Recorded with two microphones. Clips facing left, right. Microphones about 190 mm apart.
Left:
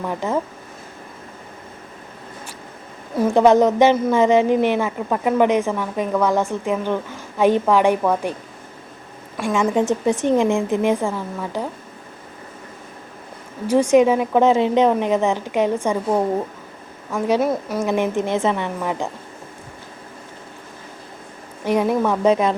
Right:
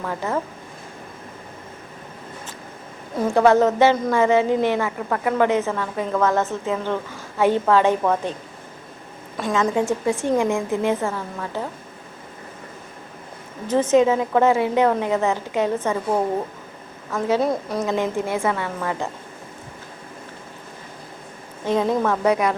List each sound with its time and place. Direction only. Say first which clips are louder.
0.0 s a woman's voice: left 2 dB; 15° left (ahead or behind)
3.2 s a woman's voice: left 2 dB; 20° left (ahead or behind)
9.5 s a woman's voice: left 2 dB; 20° left (ahead or behind)
13.7 s a woman's voice: left 2 dB; 10° left (ahead or behind)
17.4 s a woman's voice: left 1 dB; 5° left (ahead or behind)
17.8 s a woman's voice: left 3 dB; 20° left (ahead or behind)
21.6 s a woman's voice: left 2 dB; 15° left (ahead or behind)
22.3 s a woman's voice: left 3 dB; 25° left (ahead or behind)